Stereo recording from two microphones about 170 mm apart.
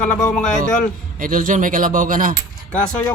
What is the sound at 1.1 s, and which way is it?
Speech, 55° right (ahead or behind).